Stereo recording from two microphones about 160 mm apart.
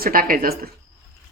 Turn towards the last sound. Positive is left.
turn(degrees=-65)  # may be behind; listen again after turning